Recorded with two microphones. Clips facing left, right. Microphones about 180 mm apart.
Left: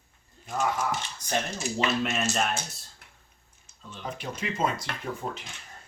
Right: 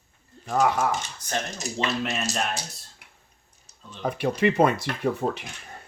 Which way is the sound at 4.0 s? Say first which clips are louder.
Right 12 dB; 60° right (ahead or behind).